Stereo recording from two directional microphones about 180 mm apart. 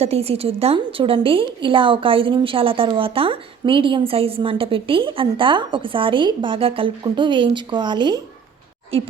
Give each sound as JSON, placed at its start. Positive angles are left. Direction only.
{"t": 0.0, "sound": "a woman's voice", "side_deg": -35}